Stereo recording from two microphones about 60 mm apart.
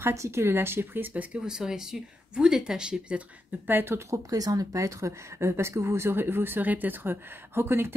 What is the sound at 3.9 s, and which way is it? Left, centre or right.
Speech, right.